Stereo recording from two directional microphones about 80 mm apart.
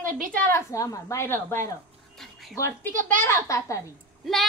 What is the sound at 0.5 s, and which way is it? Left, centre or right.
Speech, left.